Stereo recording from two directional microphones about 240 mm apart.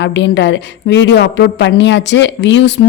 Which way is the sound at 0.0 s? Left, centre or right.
Left.